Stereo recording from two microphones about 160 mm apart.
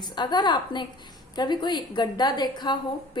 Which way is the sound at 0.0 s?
25° left (ahead or behind).